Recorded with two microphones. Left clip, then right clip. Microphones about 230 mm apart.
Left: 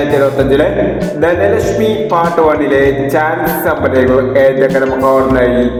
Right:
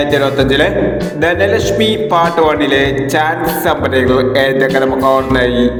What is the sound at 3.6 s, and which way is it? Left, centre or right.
A man's voice, right.